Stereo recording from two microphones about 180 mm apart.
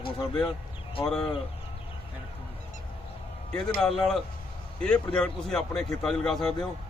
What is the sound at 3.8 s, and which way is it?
A man's voice, 5° left (ahead or behind).